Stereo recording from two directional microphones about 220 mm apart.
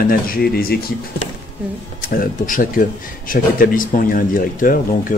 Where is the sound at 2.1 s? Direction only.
40° left (ahead or behind).